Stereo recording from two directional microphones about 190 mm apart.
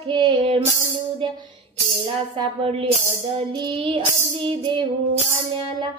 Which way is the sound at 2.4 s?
25° right (ahead or behind).